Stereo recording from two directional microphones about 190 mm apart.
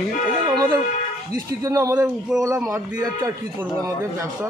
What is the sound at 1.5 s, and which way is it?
Speech, 15° right (ahead or behind).